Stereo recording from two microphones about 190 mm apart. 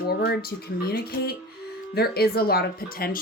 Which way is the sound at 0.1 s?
55° left (ahead or behind).